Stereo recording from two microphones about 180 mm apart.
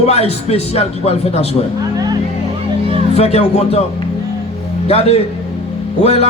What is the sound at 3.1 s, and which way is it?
Speech, 35° left (ahead or behind).